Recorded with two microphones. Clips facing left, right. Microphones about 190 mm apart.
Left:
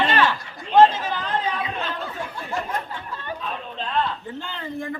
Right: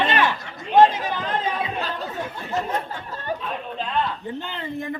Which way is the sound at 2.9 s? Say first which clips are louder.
Right 3 dB; 40° right (ahead or behind).